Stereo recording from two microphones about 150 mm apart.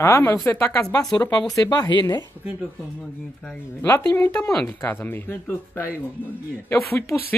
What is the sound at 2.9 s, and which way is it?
A woman's voice, 10° left (ahead or behind).